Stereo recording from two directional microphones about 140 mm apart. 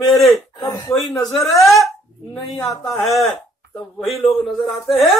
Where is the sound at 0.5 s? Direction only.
30° left (ahead or behind).